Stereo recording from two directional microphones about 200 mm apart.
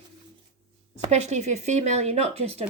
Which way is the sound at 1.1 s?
35° right (ahead or behind).